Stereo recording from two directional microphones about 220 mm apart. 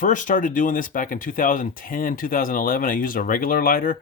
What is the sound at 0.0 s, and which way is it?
Speech, 35° left (ahead or behind).